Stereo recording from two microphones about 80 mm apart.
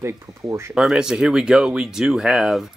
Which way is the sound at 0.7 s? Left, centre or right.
Centre.